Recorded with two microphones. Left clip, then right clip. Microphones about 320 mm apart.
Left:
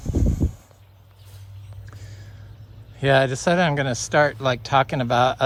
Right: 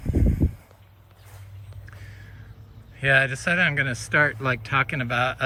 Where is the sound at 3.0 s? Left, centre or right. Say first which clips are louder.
Left 2 dB; centre.